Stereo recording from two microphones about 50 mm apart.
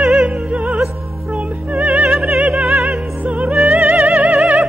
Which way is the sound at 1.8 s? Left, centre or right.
Right.